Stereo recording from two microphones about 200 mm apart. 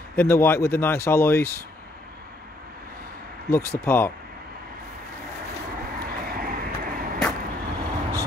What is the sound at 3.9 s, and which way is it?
Speech, 10° left (ahead or behind).